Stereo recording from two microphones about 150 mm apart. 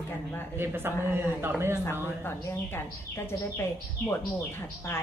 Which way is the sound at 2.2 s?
15° left (ahead or behind).